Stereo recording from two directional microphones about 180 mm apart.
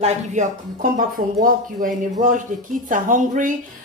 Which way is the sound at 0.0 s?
40° right (ahead or behind).